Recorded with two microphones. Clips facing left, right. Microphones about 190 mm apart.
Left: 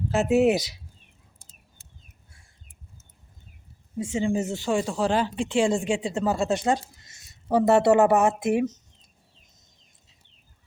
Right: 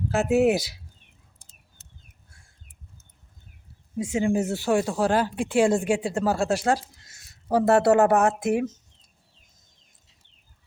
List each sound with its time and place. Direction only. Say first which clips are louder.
0.1 s speech: even; centre (ahead or behind)
3.9 s speech: right 2 dB; 10° right (ahead or behind)
5.6 s speech: right 2 dB; 55° right (ahead or behind)
5.9 s speech: right 1 dB; 5° right (ahead or behind)